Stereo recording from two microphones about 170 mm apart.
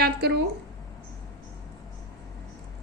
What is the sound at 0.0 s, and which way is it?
Speech, 75° right (ahead or behind).